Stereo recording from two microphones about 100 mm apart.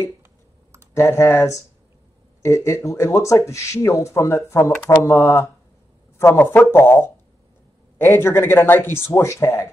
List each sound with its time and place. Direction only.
0.2 s clicking: 25° right (ahead or behind)
0.9 s speech: 30° left (ahead or behind)